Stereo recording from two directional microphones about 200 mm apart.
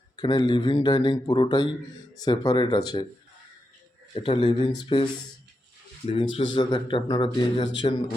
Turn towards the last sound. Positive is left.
turn(degrees=20)  # may be behind; listen again after turning